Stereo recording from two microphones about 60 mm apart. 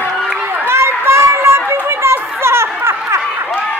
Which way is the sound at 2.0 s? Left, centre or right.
Right.